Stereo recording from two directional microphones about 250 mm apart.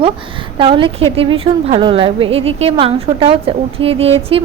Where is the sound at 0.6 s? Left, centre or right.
Right.